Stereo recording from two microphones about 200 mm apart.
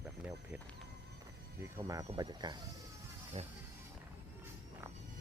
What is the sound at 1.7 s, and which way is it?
Speech, 15° right (ahead or behind).